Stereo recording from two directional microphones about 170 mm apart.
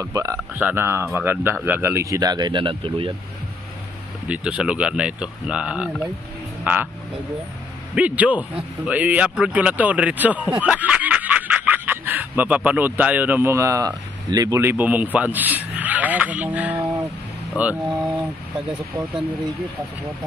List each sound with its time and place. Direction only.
0.0 s a man's voice: 20° right (ahead or behind)
4.3 s a man's voice: 5° right (ahead or behind)
7.9 s a man's voice: 10° right (ahead or behind)
15.1 s a sound: 10° right (ahead or behind)
17.6 s a man's voice: 10° right (ahead or behind)